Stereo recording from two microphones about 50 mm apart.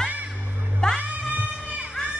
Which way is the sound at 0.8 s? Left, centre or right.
Centre.